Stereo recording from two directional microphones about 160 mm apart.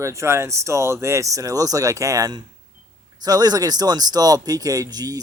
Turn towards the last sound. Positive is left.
turn(degrees=-25)  # may be behind; listen again after turning